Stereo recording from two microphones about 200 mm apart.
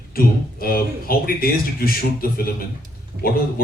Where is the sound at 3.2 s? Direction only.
55° right (ahead or behind).